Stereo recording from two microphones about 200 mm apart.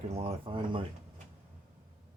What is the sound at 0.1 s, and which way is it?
Speech, 30° right (ahead or behind).